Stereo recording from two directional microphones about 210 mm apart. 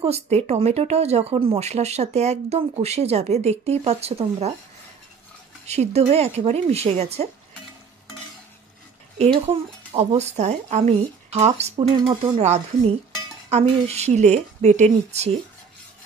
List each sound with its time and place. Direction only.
0.0 s speech: 30° right (ahead or behind)
5.7 s speech: 30° right (ahead or behind)
9.2 s speech: 25° right (ahead or behind)